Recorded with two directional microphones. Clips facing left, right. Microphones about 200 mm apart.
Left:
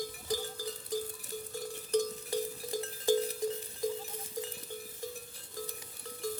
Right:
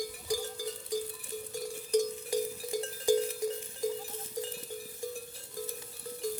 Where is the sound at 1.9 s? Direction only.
15° right (ahead or behind).